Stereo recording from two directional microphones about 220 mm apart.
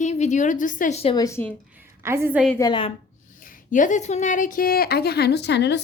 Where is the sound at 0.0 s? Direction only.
30° left (ahead or behind).